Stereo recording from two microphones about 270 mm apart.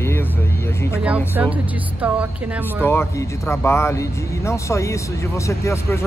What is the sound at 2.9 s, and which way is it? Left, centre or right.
Speech, centre.